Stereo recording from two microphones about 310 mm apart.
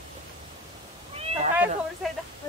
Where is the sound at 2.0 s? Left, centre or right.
Centre.